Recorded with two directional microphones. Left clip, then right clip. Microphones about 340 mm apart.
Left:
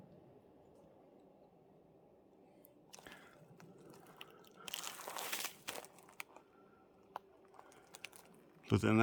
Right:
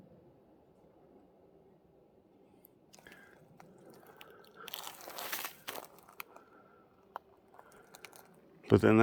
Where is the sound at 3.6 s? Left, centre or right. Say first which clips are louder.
Right 3 dB; centre.